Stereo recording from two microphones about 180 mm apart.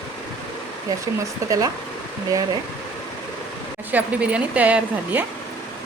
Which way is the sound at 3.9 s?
10° right (ahead or behind).